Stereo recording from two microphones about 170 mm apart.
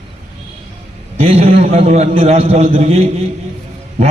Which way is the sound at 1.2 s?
40° right (ahead or behind).